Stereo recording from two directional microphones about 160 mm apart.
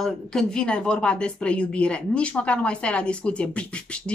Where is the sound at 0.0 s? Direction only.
5° left (ahead or behind).